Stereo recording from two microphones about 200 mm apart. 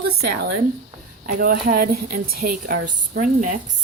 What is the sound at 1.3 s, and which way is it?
A woman's voice, 45° right (ahead or behind).